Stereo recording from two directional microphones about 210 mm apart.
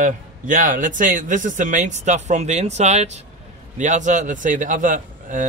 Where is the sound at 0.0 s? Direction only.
40° right (ahead or behind).